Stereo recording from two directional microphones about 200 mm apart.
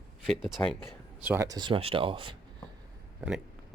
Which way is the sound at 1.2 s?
10° right (ahead or behind).